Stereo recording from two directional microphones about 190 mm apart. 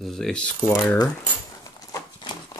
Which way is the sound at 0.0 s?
Centre (ahead or behind).